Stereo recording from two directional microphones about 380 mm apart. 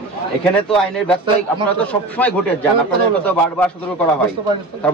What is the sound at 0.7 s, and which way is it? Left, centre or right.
Speech, centre.